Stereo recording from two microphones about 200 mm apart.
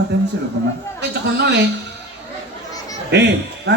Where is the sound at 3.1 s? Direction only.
60° right (ahead or behind).